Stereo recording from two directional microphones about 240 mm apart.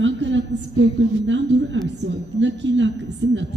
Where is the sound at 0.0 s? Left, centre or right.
Right.